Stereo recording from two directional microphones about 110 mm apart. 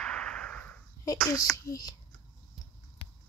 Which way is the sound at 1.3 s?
35° left (ahead or behind).